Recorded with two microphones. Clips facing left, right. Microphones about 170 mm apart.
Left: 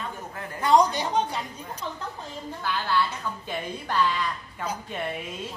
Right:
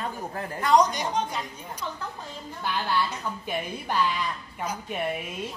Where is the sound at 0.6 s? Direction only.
25° left (ahead or behind).